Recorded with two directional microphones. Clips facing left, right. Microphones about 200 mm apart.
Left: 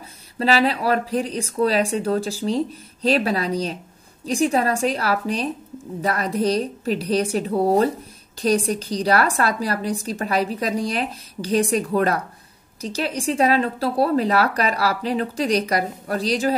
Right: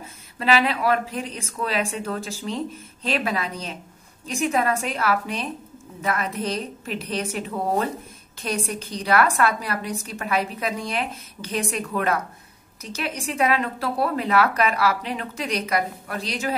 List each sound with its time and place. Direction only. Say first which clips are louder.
0.4 s a woman's voice: left 2 dB; 35° left (ahead or behind)